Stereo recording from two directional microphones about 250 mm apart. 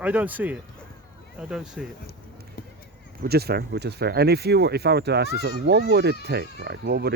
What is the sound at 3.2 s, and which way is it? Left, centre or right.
Speech, right.